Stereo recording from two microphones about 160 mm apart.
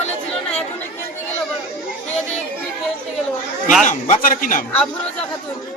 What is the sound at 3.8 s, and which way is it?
Speech, 50° left (ahead or behind).